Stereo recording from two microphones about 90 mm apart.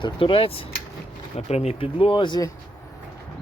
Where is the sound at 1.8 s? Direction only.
85° left; by 2.4 s 65° left (ahead or behind).